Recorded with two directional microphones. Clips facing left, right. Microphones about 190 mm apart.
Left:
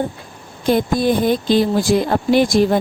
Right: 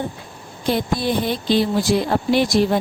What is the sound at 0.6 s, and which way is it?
Speech, 50° left (ahead or behind).